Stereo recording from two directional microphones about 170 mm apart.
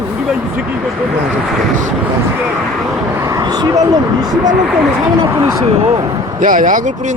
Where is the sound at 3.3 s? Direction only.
25° right (ahead or behind).